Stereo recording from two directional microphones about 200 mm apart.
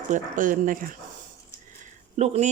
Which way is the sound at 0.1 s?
40° right (ahead or behind).